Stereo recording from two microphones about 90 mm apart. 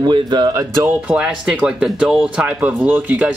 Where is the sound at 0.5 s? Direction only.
35° right (ahead or behind).